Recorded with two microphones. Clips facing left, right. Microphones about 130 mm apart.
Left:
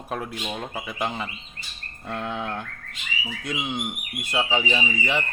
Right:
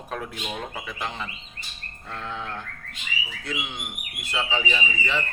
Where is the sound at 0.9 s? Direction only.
15° left (ahead or behind).